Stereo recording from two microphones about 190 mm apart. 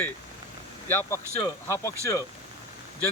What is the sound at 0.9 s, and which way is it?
Speech, 10° left (ahead or behind).